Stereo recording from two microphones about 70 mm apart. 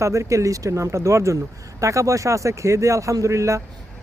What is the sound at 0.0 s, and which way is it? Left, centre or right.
Speech, right.